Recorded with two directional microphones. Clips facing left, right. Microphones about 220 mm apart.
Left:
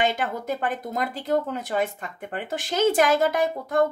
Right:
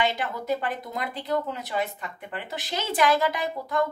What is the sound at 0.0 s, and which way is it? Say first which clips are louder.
Speech: left 2 dB; 50° left (ahead or behind).